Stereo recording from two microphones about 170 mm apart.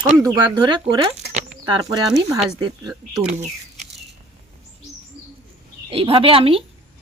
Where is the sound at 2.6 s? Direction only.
25° right (ahead or behind).